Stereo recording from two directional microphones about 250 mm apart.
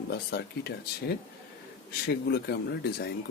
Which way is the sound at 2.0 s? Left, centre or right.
Left.